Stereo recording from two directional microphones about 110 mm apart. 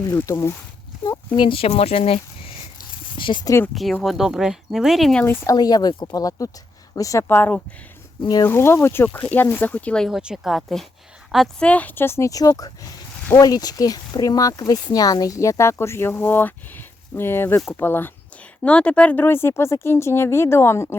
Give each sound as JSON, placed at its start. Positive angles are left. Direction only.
{"t": 0.1, "sound": "speech", "side_deg": 25}
{"t": 1.0, "sound": "a sound", "side_deg": 35}
{"t": 1.5, "sound": "speech", "side_deg": 60}
{"t": 3.2, "sound": "a sound", "side_deg": 50}
{"t": 4.0, "sound": "speech", "side_deg": 0}
{"t": 5.2, "sound": "speech", "side_deg": 20}
{"t": 5.5, "sound": "speech", "side_deg": 35}
{"t": 7.3, "sound": "speech", "side_deg": 20}
{"t": 8.2, "sound": "speech", "side_deg": 35}
{"t": 8.4, "sound": "speech", "side_deg": 20}
{"t": 10.1, "sound": "speech", "side_deg": -5}
{"t": 11.6, "sound": "speech", "side_deg": 15}